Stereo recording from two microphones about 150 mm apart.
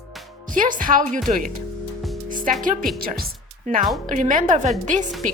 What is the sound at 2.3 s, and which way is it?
Music, 65° right (ahead or behind).